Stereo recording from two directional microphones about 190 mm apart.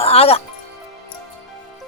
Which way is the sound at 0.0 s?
30° left (ahead or behind).